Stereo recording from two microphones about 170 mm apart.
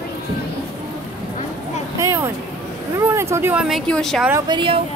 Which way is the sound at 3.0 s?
15° right (ahead or behind).